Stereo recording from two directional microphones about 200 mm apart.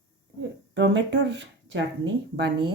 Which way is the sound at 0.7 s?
60° right (ahead or behind).